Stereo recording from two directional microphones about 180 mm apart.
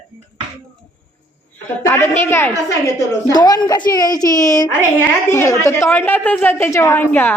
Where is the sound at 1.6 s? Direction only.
15° left (ahead or behind).